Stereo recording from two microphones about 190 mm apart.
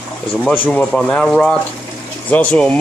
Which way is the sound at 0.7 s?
5° left (ahead or behind).